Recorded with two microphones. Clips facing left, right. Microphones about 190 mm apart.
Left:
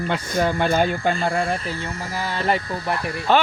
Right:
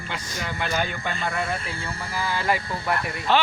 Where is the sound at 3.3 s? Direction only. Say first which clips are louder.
Left 3 dB; 45° left (ahead or behind).